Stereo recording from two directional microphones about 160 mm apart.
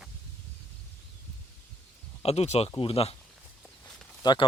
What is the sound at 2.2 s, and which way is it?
Speech, 40° left (ahead or behind).